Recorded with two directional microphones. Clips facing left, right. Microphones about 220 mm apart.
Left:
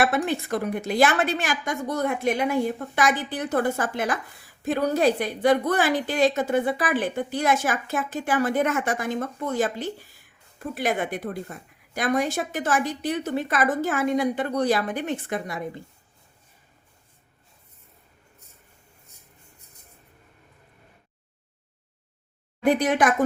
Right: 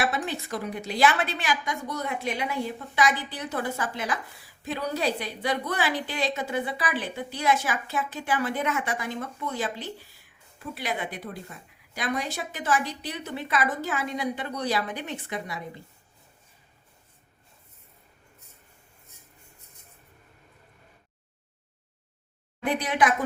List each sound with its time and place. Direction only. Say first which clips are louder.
0.0 s a woman's voice: left 6 dB; 55° left (ahead or behind)
22.6 s a woman's voice: left 5 dB; 45° left (ahead or behind)